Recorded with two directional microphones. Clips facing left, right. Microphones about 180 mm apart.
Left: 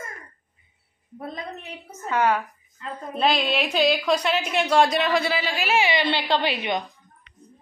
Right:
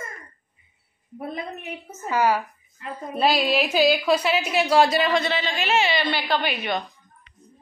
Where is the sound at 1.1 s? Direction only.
10° right (ahead or behind); by 6.8 s 25° left (ahead or behind).